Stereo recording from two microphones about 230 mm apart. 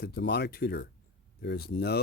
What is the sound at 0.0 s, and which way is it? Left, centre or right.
Speech, left.